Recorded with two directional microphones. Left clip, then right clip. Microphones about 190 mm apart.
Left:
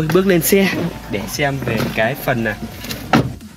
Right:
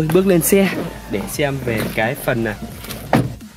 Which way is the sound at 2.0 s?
35° right (ahead or behind).